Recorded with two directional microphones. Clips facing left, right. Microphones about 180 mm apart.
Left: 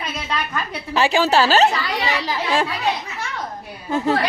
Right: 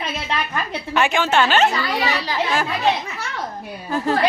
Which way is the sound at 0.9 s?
35° left (ahead or behind).